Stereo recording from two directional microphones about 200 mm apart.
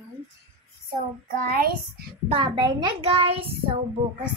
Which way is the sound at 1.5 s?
50° right (ahead or behind).